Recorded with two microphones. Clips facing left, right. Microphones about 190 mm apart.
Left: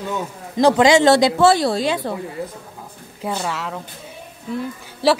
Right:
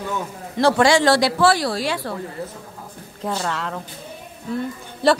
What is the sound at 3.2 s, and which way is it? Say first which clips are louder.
Speech: even; 5° left (ahead or behind).